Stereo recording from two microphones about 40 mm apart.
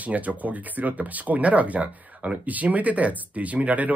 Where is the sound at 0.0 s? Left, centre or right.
Right.